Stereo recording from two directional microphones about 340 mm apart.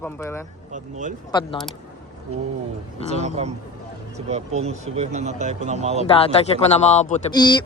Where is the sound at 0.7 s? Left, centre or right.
Right.